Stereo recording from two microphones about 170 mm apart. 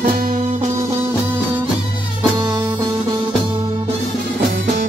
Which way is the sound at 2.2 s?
30° right (ahead or behind).